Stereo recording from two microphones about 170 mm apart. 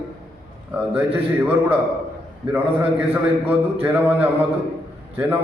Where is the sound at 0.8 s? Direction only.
10° right (ahead or behind).